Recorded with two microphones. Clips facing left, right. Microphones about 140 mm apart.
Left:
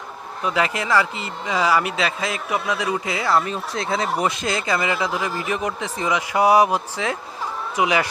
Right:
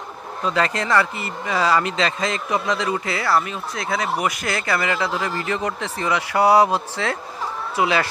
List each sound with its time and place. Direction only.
0.4 s speech: 10° left (ahead or behind)
3.4 s speech: 35° left (ahead or behind); by 8.0 s 15° left (ahead or behind)